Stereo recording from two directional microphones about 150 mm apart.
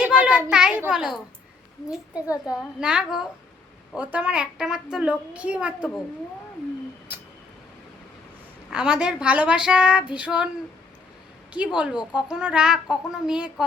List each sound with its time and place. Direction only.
0.0 s children playing: 10° right (ahead or behind)
0.5 s speech: 5° right (ahead or behind)
2.2 s a child's voice: 25° left (ahead or behind)
2.6 s a woman's voice: 5° right (ahead or behind)
7.1 s a sound: 15° right (ahead or behind)
8.7 s a woman's voice: 5° right (ahead or behind)
11.5 s a woman's voice: 10° right (ahead or behind)